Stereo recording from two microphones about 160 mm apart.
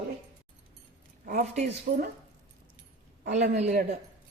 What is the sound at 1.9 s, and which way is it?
Speech, 65° right (ahead or behind).